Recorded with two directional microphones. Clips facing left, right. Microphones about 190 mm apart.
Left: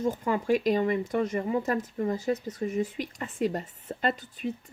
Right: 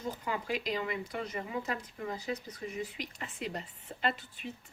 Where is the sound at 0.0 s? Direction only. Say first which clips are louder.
Left 9 dB; 45° left (ahead or behind).